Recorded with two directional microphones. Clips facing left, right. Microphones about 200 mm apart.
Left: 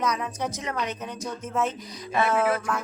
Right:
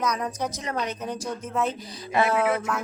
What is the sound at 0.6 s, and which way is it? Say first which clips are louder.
Speech: right 2 dB; 35° right (ahead or behind).